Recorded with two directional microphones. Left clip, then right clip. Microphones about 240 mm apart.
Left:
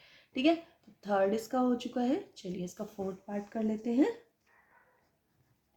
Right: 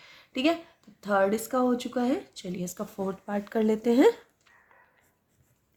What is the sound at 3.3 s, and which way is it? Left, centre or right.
Speech, right.